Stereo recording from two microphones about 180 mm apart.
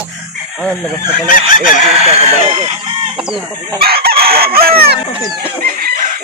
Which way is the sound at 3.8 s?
55° right (ahead or behind).